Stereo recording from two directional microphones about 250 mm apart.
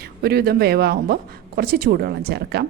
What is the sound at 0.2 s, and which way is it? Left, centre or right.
Speech, right.